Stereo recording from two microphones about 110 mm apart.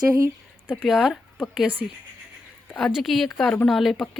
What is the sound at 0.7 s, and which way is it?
Speech, centre (ahead or behind).